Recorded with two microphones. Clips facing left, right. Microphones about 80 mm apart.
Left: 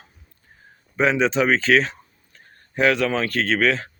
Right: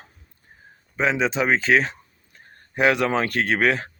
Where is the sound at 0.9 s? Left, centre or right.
Centre.